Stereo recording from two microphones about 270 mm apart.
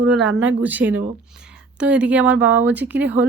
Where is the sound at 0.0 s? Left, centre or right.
Centre.